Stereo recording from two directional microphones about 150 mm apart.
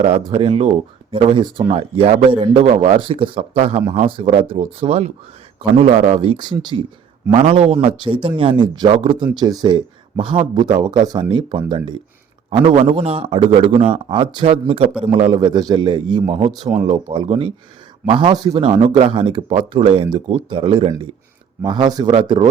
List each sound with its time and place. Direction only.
0.3 s speech: 40° right (ahead or behind)